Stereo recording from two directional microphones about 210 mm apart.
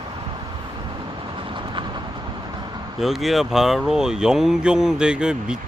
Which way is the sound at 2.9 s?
Centre (ahead or behind).